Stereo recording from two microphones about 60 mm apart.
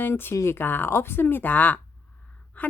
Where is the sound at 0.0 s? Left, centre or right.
Left.